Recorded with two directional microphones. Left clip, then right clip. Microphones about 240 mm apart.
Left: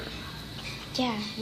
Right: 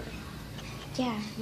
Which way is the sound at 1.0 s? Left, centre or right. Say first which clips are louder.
Left 3 dB; centre.